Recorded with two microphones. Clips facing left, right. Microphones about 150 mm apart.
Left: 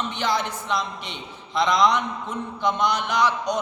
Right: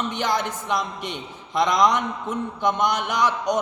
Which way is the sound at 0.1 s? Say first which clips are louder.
Right 1 dB; 50° right (ahead or behind).